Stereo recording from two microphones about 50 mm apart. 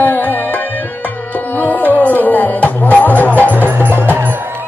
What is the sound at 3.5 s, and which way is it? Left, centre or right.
Music, right.